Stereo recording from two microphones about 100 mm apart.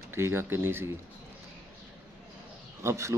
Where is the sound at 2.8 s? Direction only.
30° right (ahead or behind).